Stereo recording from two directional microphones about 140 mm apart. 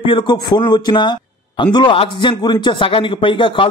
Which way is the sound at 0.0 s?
35° left (ahead or behind).